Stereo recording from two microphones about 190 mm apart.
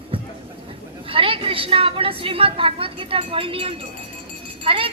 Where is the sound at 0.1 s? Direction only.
30° right (ahead or behind).